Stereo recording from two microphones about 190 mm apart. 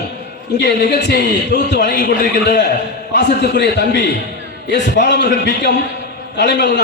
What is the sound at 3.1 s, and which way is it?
A man's voice, 65° left (ahead or behind).